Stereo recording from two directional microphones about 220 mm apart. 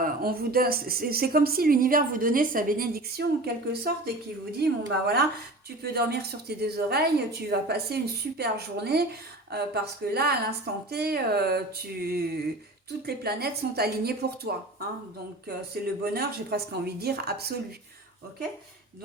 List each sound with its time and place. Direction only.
0.0 s speech: 45° right (ahead or behind)